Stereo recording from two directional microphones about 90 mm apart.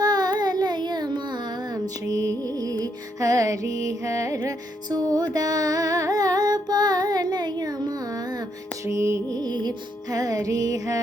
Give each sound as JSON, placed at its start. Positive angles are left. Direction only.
{"t": 0.0, "sound": "music", "side_deg": -50}
{"t": 9.4, "sound": "music", "side_deg": -50}